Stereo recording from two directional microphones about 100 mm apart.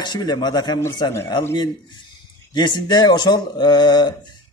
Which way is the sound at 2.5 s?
45° left (ahead or behind).